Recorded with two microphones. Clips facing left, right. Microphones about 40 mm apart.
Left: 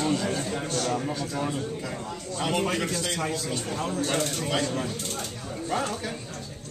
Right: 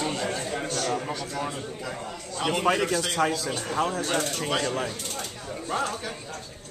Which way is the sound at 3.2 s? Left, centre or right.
Right.